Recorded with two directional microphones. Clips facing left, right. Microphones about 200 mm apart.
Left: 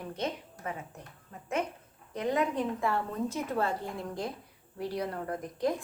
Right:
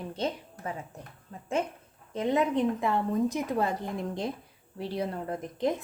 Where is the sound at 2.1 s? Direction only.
25° right (ahead or behind).